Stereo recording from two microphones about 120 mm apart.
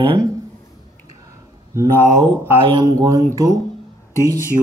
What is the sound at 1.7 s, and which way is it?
Speech, 20° right (ahead or behind).